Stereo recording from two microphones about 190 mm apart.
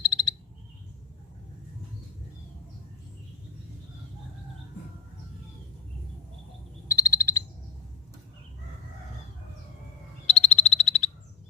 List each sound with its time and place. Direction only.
0.0 s frog: 20° left (ahead or behind)
6.8 s frog: 15° left (ahead or behind)
10.2 s frog: 35° left (ahead or behind)